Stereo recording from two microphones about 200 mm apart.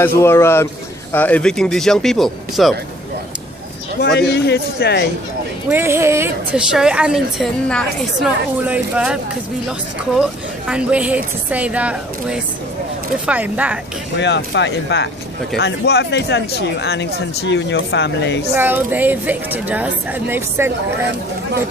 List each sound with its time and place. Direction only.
0.0 s a man's voice: 10° left (ahead or behind)
4.0 s speech: 55° left (ahead or behind)
5.7 s a woman's voice: 10° right (ahead or behind)
10.7 s a woman's voice: 5° right (ahead or behind)
14.2 s speech: 60° left (ahead or behind)
18.5 s a woman's voice: 10° right (ahead or behind)